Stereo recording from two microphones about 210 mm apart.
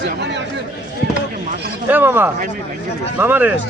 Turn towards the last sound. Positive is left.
turn(degrees=-10)  # may be behind; listen again after turning